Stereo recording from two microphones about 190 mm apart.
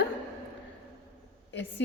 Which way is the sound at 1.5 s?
70° left (ahead or behind).